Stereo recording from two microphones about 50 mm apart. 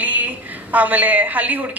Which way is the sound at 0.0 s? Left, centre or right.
Right.